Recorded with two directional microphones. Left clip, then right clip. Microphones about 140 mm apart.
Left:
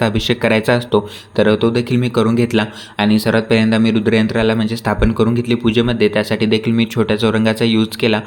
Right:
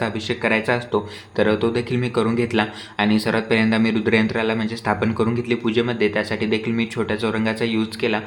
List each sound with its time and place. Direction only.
0.0 s speech: 45° left (ahead or behind)